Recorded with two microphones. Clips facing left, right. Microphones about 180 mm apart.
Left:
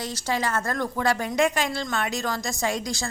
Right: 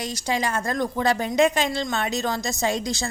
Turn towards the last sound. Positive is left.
turn(degrees=-25)  # may be behind; listen again after turning